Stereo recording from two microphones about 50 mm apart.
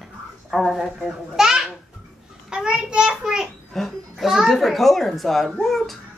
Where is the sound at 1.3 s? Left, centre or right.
Centre.